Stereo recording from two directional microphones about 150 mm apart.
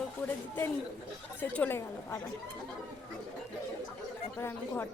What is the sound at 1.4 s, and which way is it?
Speech, 10° left (ahead or behind).